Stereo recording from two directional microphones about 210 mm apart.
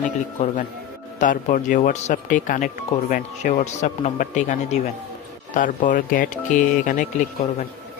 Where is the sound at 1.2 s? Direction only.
35° left (ahead or behind).